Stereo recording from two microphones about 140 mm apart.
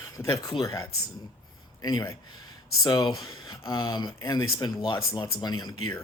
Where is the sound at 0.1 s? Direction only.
30° left (ahead or behind).